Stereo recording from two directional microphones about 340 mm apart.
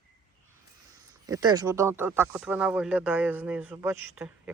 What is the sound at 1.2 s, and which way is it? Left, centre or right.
Speech, centre.